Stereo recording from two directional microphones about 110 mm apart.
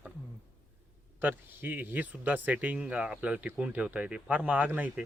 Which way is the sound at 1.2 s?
15° right (ahead or behind).